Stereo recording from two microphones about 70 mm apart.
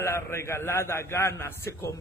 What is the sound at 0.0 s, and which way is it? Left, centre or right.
A man's voice, left.